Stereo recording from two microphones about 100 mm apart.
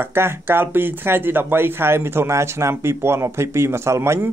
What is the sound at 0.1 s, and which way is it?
Speech, 25° right (ahead or behind).